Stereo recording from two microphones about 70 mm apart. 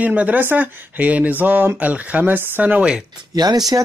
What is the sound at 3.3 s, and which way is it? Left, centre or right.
Speech, right.